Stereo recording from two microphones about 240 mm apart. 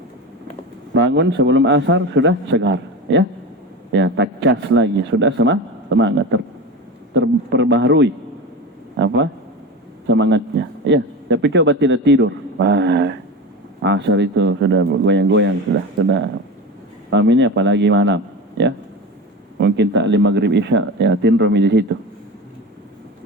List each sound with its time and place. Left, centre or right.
0.9 s a man's voice: right